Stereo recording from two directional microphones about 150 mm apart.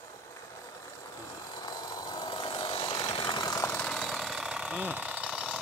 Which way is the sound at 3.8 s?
Centre (ahead or behind).